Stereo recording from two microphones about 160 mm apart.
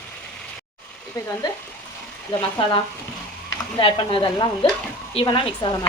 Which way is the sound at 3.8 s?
35° left (ahead or behind).